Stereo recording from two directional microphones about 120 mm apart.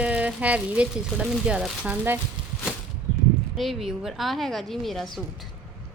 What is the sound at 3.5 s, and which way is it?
A woman's voice, centre (ahead or behind).